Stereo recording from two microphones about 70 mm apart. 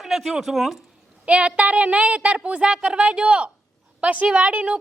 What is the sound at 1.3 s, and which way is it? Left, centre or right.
A man's voice, centre.